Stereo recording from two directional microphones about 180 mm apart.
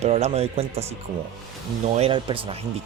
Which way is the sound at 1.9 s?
30° right (ahead or behind).